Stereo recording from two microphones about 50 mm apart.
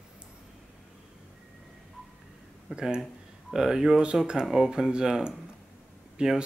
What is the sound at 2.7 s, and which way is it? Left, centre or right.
Speech, centre.